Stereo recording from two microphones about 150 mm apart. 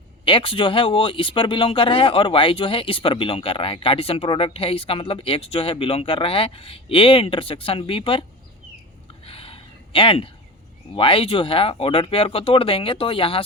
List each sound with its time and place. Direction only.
0.3 s speech: 35° left (ahead or behind)
9.2 s a sound: 40° left (ahead or behind)
10.9 s speech: 35° left (ahead or behind)